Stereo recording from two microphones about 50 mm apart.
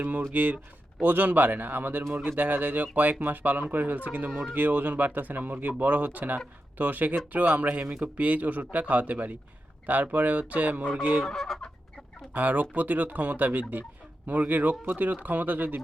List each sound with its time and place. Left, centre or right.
0.3 s speech: right
11.2 s fowl: centre
12.3 s speech: right